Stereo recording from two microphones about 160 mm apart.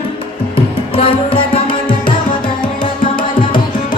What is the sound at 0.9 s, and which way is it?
Music, 35° left (ahead or behind).